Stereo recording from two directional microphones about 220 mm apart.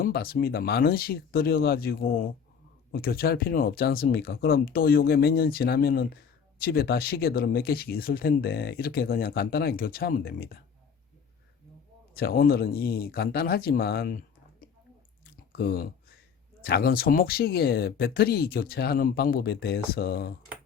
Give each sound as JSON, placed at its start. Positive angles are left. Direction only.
{"t": 0.0, "sound": "speech", "side_deg": 45}
{"t": 12.1, "sound": "speech", "side_deg": 45}
{"t": 15.2, "sound": "chewing", "side_deg": 45}
{"t": 16.6, "sound": "speech", "side_deg": 45}